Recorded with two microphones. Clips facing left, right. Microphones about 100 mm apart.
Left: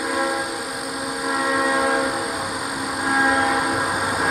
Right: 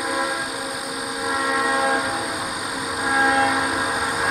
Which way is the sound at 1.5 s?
10° left (ahead or behind).